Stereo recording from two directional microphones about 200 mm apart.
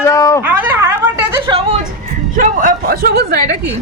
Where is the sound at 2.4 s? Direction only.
45° right (ahead or behind).